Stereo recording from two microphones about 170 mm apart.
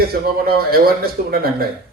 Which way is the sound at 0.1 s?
65° right (ahead or behind).